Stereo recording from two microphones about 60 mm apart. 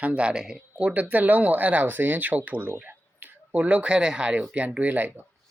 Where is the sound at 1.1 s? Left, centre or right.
Right.